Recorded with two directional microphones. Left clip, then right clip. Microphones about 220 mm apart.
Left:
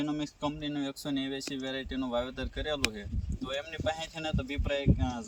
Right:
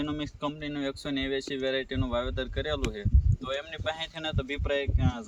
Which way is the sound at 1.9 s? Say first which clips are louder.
Right 2 dB; 10° right (ahead or behind).